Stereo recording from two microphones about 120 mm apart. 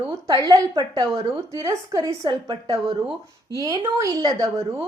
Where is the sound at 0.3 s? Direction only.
30° right (ahead or behind).